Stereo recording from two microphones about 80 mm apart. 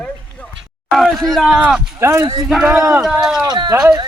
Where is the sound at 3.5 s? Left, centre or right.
Right.